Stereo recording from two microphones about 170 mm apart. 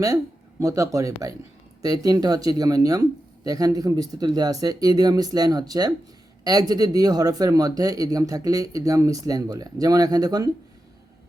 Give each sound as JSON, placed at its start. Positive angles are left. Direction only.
{"t": 0.6, "sound": "speech", "side_deg": -20}